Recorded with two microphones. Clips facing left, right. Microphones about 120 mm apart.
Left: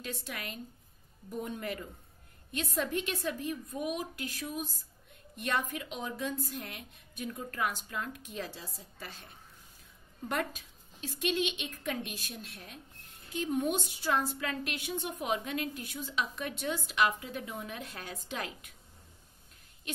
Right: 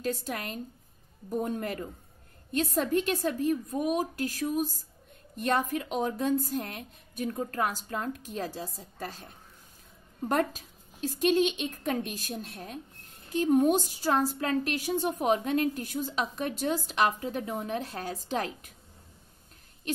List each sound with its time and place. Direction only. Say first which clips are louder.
0.0 s a woman's voice: right 8 dB; 40° right (ahead or behind)